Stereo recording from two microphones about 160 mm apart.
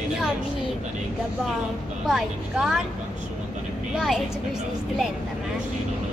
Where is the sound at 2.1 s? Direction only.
5° right (ahead or behind).